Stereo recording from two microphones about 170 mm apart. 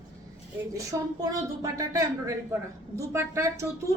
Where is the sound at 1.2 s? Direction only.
20° right (ahead or behind).